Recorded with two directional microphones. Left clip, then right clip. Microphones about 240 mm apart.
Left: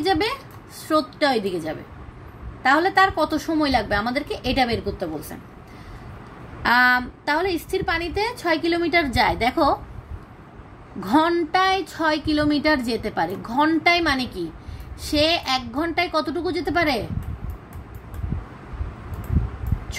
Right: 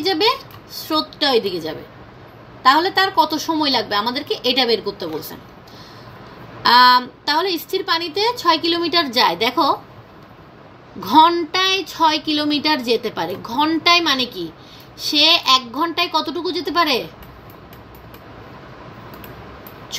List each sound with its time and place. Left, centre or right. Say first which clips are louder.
0.8 s a woman's voice: right 1 dB; left
6.6 s a woman's voice: right 6 dB; left
11.0 s speech: right 7 dB; left